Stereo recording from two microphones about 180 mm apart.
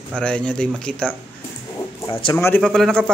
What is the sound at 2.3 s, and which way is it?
Speech, 10° left (ahead or behind).